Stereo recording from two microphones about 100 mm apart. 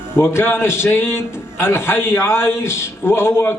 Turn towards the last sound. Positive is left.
turn(degrees=25)  # may be behind; listen again after turning